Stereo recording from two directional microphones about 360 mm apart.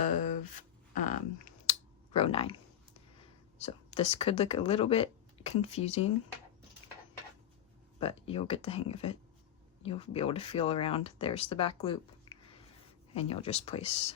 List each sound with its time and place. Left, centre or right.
0.0 s a sound: left
2.1 s speech: centre
3.6 s speech: centre
6.8 s dishes: centre
7.9 s speech: centre